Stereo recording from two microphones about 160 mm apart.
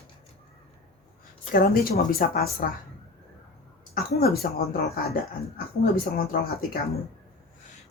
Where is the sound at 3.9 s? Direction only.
75° left (ahead or behind).